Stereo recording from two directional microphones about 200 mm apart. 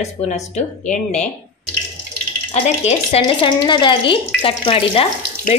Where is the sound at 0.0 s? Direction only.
35° left (ahead or behind).